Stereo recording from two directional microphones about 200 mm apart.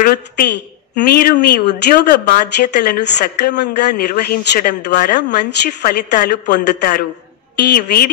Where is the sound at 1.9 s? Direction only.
55° left (ahead or behind).